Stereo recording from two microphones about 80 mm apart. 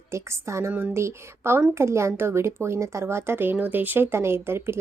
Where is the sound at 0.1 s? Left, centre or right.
Right.